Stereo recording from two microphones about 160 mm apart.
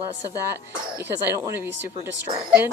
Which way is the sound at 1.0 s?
15° right (ahead or behind).